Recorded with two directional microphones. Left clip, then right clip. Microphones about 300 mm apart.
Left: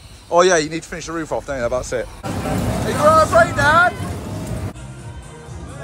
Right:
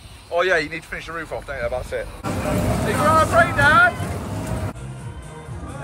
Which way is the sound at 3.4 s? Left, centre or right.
Centre.